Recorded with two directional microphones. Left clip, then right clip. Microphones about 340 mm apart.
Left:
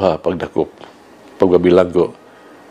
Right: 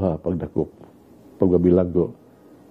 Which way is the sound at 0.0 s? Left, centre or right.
Centre.